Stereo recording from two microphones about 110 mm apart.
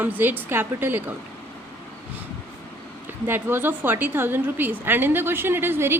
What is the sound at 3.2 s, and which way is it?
A woman's voice, 20° right (ahead or behind).